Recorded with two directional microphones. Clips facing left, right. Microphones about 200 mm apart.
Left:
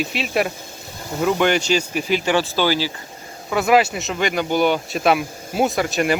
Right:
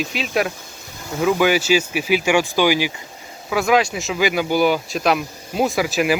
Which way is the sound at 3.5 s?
Centre (ahead or behind).